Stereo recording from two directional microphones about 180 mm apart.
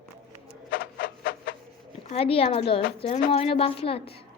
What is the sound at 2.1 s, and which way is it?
A woman's voice, 35° left (ahead or behind).